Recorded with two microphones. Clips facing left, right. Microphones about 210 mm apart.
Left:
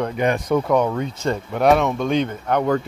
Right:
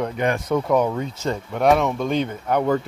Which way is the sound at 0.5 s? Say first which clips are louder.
Even; 5° right (ahead or behind).